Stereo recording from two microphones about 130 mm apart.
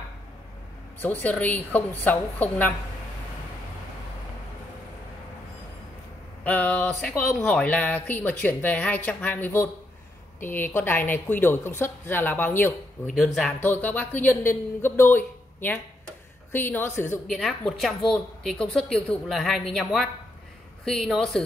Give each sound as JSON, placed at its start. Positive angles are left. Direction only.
{"t": 0.9, "sound": "speech", "side_deg": 15}
{"t": 6.4, "sound": "speech", "side_deg": 10}
{"t": 13.0, "sound": "a woman's voice", "side_deg": 0}
{"t": 13.6, "sound": "speech", "side_deg": 15}
{"t": 17.3, "sound": "a woman's voice", "side_deg": 0}